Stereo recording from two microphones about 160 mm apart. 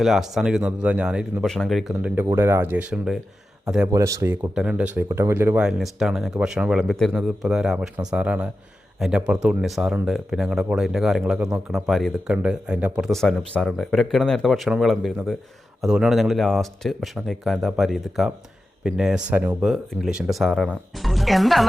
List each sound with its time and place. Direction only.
0.0 s speech: centre (ahead or behind)
3.9 s speech: 20° right (ahead or behind)
4.5 s speech: 5° right (ahead or behind)